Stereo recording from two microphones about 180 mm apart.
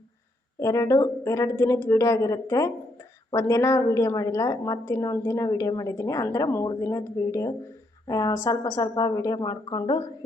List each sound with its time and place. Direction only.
0.6 s a woman's voice: 20° left (ahead or behind)